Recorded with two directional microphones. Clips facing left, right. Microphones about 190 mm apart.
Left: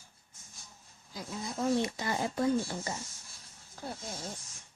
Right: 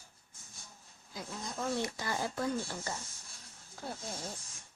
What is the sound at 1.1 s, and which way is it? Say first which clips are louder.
Speech: left 3 dB; centre (ahead or behind).